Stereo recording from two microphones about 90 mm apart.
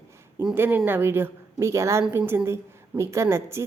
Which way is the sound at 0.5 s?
25° right (ahead or behind).